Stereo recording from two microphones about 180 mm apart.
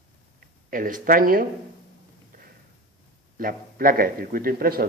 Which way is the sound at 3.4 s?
50° right (ahead or behind).